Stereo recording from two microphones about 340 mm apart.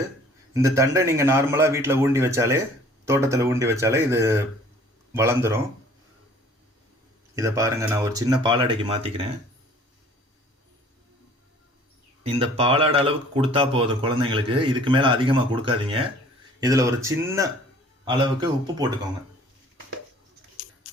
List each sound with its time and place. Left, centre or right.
0.5 s speech: centre
7.3 s speech: centre
12.3 s speech: centre